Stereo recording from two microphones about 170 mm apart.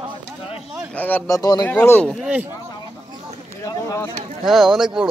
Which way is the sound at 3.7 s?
20° left (ahead or behind).